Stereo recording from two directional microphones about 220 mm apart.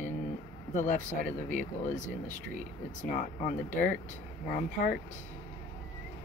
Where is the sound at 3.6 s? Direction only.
35° left (ahead or behind).